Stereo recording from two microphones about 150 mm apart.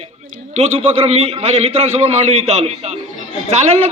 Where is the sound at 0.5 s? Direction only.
45° right (ahead or behind).